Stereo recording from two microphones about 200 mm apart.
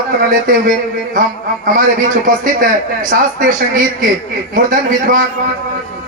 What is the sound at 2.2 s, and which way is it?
Speech, 45° right (ahead or behind).